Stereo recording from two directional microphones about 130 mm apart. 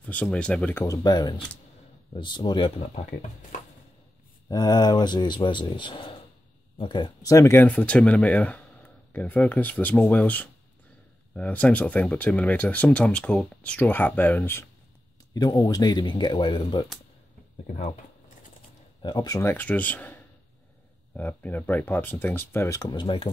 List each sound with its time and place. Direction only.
0.0 s speech: 10° left (ahead or behind)
0.8 s speech: 30° left (ahead or behind)
4.5 s speech: 30° left (ahead or behind)
7.2 s speech: 25° left (ahead or behind)
7.6 s speech: 10° left (ahead or behind)
15.3 s speech: 30° left (ahead or behind)
19.0 s speech: 30° left (ahead or behind)
19.4 s speech: 15° left (ahead or behind)
22.8 s speech: 35° left (ahead or behind)